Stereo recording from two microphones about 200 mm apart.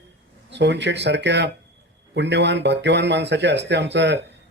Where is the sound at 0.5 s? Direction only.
60° right (ahead or behind).